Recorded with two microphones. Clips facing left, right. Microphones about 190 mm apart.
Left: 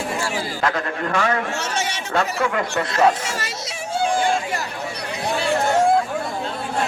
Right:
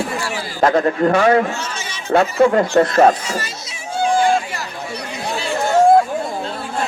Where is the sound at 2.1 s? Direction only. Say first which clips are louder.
Right 9 dB; 35° right (ahead or behind).